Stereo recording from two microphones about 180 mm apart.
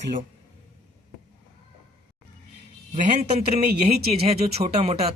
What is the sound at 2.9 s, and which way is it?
A man's voice, 40° right (ahead or behind).